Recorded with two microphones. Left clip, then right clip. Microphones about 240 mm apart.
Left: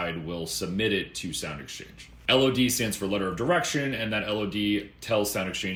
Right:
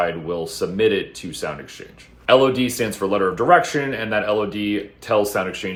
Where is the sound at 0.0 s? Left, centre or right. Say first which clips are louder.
Right 10 dB; centre.